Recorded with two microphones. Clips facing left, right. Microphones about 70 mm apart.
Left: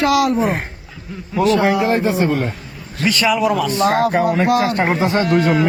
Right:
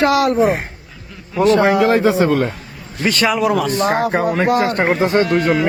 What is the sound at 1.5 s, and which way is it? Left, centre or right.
Speech, right.